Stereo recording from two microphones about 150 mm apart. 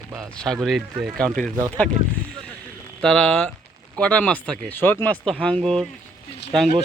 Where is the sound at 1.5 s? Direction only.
25° right (ahead or behind).